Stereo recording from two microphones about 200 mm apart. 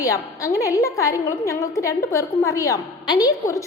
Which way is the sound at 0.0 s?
15° left (ahead or behind).